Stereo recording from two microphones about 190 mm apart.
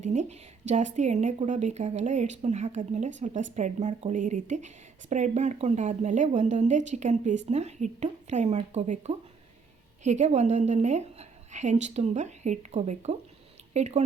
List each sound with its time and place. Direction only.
0.0 s speech: 40° right (ahead or behind)